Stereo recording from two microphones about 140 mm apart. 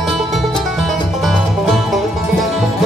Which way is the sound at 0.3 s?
Centre (ahead or behind).